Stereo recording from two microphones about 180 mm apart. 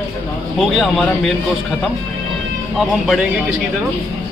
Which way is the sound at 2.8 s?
Centre (ahead or behind).